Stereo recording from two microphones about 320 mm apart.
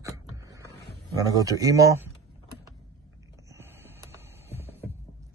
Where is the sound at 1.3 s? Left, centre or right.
Centre.